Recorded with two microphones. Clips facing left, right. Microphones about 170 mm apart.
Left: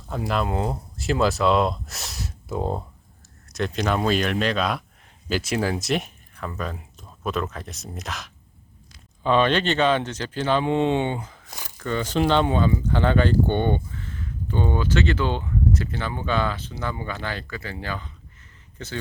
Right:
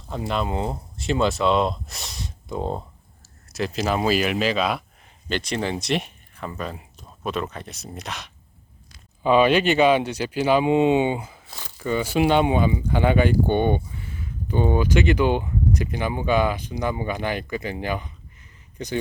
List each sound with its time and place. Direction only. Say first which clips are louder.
0.1 s a man's voice: left 1 dB; centre (ahead or behind); by 18.9 s 15° right (ahead or behind)